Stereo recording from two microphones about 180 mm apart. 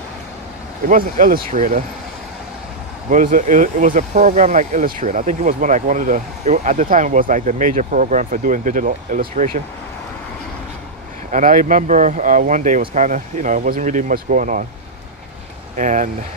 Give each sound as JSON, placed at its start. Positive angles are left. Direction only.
{"t": 0.8, "sound": "speech", "side_deg": -50}
{"t": 3.1, "sound": "speech", "side_deg": -45}
{"t": 11.3, "sound": "speech", "side_deg": -45}
{"t": 15.8, "sound": "speech", "side_deg": -45}